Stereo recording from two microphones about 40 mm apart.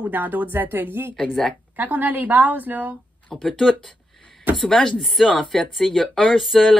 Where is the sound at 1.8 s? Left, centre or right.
Right.